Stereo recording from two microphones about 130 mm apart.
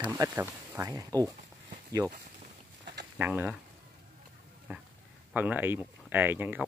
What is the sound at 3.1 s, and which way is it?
Speech, 15° right (ahead or behind).